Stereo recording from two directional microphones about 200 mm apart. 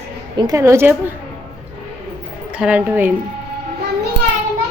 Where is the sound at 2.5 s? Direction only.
5° right (ahead or behind).